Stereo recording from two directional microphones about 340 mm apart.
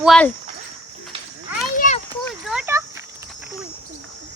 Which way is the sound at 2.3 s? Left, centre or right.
Centre.